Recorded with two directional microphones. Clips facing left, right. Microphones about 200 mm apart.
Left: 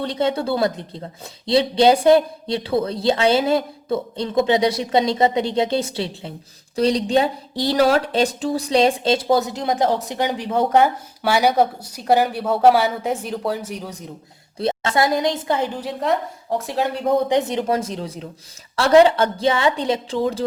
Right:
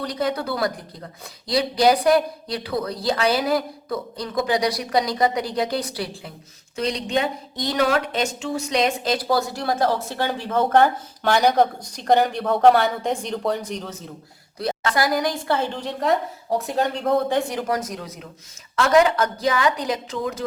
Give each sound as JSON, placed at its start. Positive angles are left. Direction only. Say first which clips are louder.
{"t": 0.0, "sound": "a woman's voice", "louder": "left 3 dB", "side_deg": 25}
{"t": 14.6, "sound": "a woman's voice", "louder": "left 3 dB", "side_deg": 25}
{"t": 17.1, "sound": "a woman's voice", "louder": "left 4 dB", "side_deg": 15}